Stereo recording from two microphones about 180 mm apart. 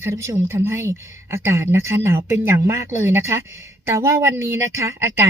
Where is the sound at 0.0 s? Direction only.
15° right (ahead or behind).